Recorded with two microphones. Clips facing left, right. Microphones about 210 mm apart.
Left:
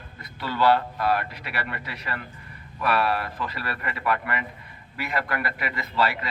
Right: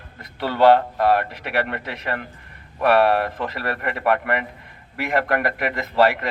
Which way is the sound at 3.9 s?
55° right (ahead or behind).